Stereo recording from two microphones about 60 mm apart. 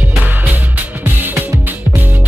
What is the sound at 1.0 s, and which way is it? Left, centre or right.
Music, right.